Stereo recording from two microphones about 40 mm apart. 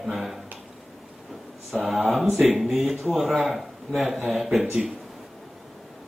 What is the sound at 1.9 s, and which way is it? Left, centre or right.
A man's voice, centre.